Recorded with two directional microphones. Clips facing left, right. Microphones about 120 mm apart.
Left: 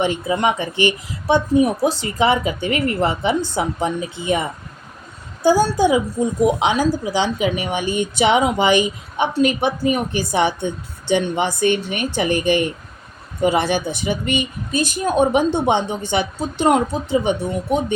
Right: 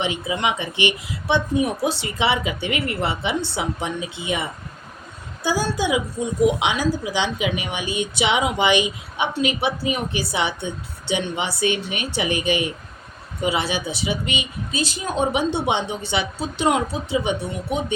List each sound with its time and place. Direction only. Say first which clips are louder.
0.0 s a woman's voice: left 5 dB; 45° left (ahead or behind)